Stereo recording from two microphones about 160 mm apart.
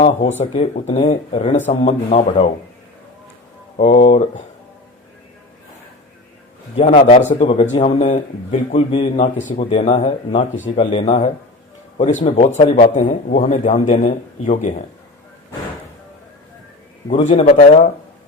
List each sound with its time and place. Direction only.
0.5 s speech: 40° left (ahead or behind)
3.8 s speech: 45° left (ahead or behind)
6.7 s speech: 40° left (ahead or behind)
8.9 s speech: 35° left (ahead or behind)
10.7 s speech: 35° left (ahead or behind); by 14.8 s 50° left (ahead or behind)
17.2 s speech: 35° left (ahead or behind)